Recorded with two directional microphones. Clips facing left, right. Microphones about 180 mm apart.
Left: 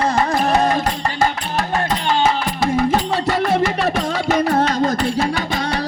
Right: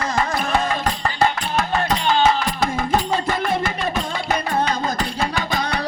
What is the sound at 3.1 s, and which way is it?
Music, 75° left (ahead or behind).